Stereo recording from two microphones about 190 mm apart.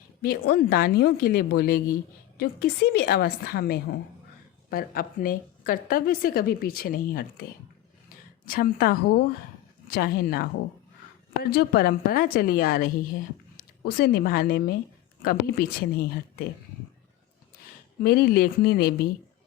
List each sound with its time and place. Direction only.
0.2 s a woman's voice: 55° left (ahead or behind)
8.4 s a woman's voice: 50° left (ahead or behind)
11.5 s a woman's voice: 55° left (ahead or behind)
18.0 s a woman's voice: 55° left (ahead or behind)